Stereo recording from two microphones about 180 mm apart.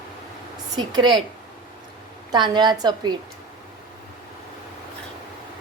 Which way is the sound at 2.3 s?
25° right (ahead or behind).